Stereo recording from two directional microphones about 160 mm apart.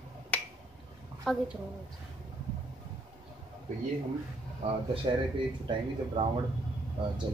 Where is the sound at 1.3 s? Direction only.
Centre (ahead or behind).